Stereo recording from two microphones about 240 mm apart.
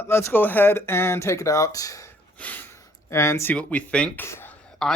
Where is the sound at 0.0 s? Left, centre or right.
Centre.